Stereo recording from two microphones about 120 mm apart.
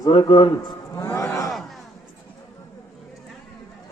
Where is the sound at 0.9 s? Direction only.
25° left (ahead or behind).